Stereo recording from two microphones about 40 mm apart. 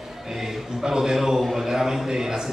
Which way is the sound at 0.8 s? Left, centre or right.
Centre.